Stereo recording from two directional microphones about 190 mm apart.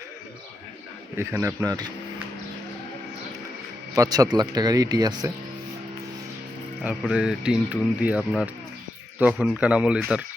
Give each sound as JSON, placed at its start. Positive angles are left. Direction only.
{"t": 1.1, "sound": "a man's voice", "side_deg": -10}
{"t": 3.9, "sound": "speech", "side_deg": -20}
{"t": 6.8, "sound": "speech", "side_deg": -5}